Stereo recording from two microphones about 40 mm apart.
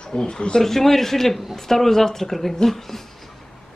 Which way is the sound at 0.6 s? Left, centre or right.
Centre.